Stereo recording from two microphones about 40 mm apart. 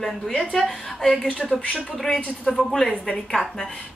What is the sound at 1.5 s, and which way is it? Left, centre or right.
Speech, centre.